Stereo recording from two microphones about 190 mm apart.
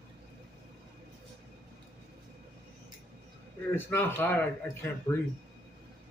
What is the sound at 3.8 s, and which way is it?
Speech, 10° left (ahead or behind).